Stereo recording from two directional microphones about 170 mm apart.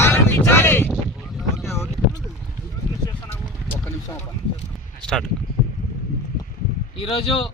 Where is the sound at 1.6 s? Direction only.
15° left (ahead or behind).